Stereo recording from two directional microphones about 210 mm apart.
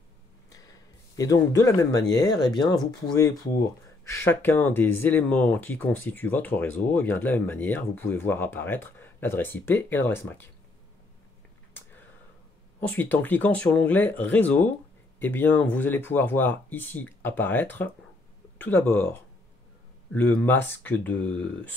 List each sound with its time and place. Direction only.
0.5 s a sound: 15° left (ahead or behind)
2.1 s speech: 20° left (ahead or behind)
12.8 s speech: 10° left (ahead or behind)